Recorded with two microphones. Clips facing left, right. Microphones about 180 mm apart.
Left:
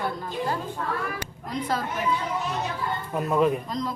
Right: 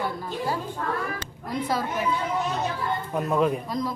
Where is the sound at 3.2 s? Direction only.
Centre (ahead or behind).